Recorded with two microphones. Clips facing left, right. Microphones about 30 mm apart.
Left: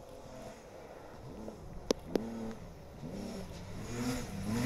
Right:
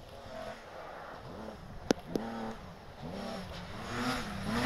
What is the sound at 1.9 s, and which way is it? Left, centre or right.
Vehicle, centre.